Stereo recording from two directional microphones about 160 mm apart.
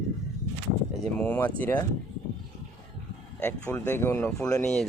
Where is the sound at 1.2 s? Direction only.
10° left (ahead or behind).